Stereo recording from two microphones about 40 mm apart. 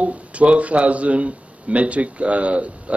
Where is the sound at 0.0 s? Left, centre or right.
Right.